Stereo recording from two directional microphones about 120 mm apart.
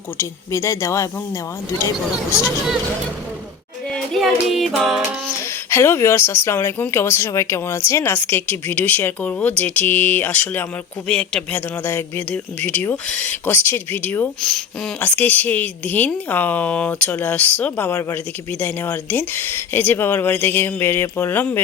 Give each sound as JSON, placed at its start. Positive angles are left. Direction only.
{"t": 0.2, "sound": "speech", "side_deg": 25}
{"t": 3.9, "sound": "music", "side_deg": 0}
{"t": 5.7, "sound": "speech", "side_deg": 20}